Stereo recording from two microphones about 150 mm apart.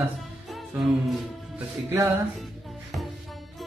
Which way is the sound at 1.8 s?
15° right (ahead or behind).